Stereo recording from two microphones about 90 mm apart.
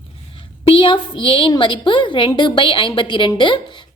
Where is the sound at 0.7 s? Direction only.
70° left (ahead or behind).